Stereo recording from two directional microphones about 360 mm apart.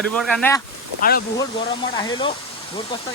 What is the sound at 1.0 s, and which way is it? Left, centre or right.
Speech, left.